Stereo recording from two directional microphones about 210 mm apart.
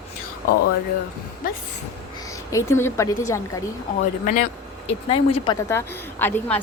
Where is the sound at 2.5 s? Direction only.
15° left (ahead or behind).